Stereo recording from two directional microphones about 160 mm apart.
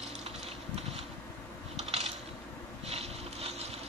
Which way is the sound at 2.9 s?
40° right (ahead or behind).